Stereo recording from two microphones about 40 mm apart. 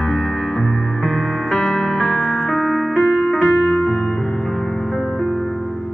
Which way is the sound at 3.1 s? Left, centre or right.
Centre.